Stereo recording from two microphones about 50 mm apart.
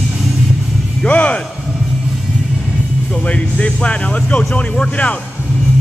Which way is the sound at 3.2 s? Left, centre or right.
Left.